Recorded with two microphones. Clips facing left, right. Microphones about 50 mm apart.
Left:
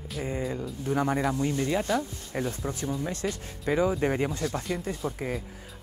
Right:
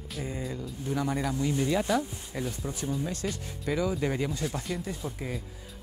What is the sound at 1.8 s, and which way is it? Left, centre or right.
Speech, centre.